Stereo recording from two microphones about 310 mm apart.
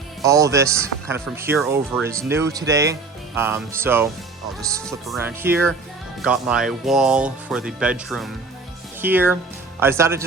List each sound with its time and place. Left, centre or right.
0.2 s speech: centre